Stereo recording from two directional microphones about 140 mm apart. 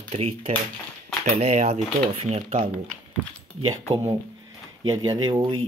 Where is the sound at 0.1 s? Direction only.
45° right (ahead or behind).